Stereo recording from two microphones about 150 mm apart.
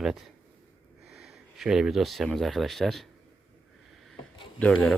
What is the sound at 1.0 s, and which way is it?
Speech, centre (ahead or behind).